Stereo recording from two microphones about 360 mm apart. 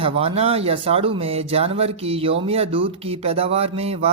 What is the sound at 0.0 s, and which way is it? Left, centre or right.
Speech, centre.